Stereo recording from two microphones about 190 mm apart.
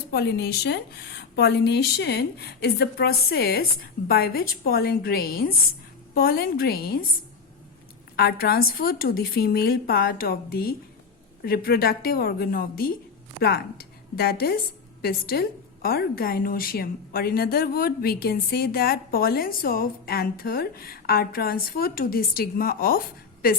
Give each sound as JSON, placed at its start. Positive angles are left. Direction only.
{"t": 0.1, "sound": "a woman's voice", "side_deg": 60}
{"t": 8.1, "sound": "a woman's voice", "side_deg": 55}